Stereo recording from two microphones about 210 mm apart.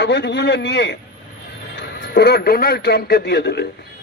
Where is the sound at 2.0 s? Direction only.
50° left (ahead or behind).